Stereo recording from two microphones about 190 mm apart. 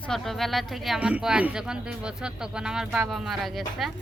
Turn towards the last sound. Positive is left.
turn(degrees=0)  # may be behind; listen again after turning